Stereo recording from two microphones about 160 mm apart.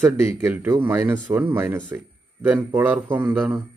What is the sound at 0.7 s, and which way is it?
Speech, 15° right (ahead or behind).